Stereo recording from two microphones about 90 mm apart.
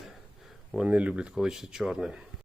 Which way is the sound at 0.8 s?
15° right (ahead or behind).